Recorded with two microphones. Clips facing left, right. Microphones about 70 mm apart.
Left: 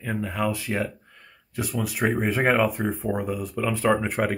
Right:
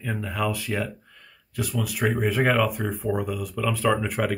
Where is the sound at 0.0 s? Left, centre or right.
Centre.